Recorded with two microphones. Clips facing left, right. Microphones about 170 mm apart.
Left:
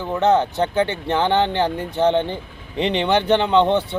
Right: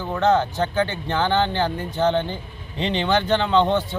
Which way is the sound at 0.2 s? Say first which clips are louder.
Left 2 dB; 20° left (ahead or behind).